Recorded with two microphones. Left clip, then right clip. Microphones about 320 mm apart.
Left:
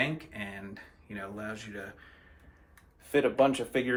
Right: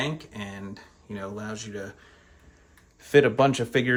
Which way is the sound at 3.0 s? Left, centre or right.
Right.